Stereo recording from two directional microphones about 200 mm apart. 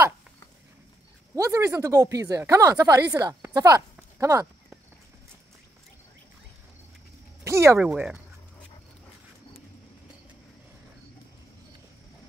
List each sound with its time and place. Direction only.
1.3 s speech: 15° right (ahead or behind)
7.4 s speech: 15° right (ahead or behind)